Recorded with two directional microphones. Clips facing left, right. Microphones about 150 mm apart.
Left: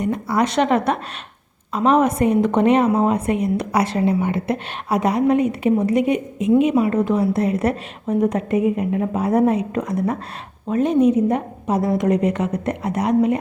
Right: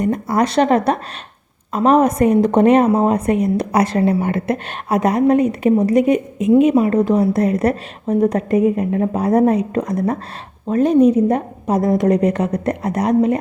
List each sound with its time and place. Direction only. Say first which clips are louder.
0.0 s a woman's voice: right 3 dB; 45° right (ahead or behind)